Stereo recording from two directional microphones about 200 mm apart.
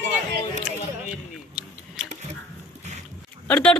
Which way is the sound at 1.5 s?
5° right (ahead or behind).